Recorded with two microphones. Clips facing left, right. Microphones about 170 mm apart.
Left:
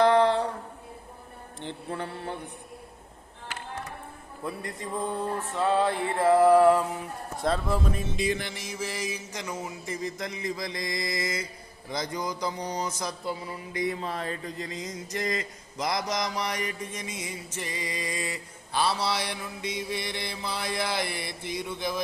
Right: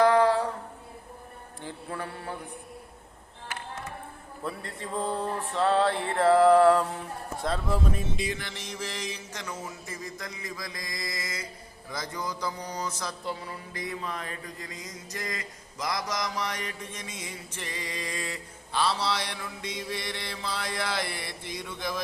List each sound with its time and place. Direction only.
0.0 s a sound: 25° left (ahead or behind)
1.6 s mantra: 25° left (ahead or behind)
4.4 s a man's voice: 15° left (ahead or behind)
8.4 s mantra: 10° left (ahead or behind)
11.9 s a man's voice: 20° left (ahead or behind)
14.0 s a man's voice: 30° left (ahead or behind); by 22.0 s 10° left (ahead or behind)